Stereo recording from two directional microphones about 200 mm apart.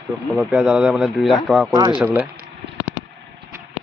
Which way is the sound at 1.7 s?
20° right (ahead or behind).